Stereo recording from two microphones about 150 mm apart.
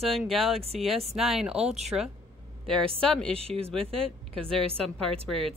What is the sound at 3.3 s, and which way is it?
Speech, 40° right (ahead or behind).